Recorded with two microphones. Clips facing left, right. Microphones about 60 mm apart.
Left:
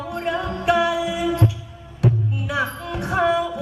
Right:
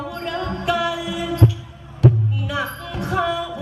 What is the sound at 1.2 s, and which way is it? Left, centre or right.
Heart sounds, left.